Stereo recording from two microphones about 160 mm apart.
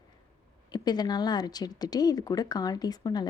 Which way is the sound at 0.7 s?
25° left (ahead or behind).